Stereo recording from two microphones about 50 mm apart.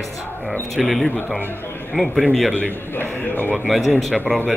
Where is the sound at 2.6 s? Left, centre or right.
Left.